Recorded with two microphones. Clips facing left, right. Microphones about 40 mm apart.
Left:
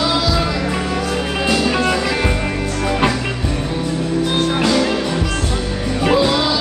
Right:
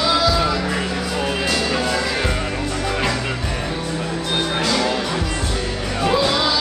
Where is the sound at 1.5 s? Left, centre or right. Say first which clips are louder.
Left 7 dB; centre.